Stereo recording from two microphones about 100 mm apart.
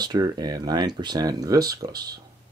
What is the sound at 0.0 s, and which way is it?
Speech, 45° right (ahead or behind).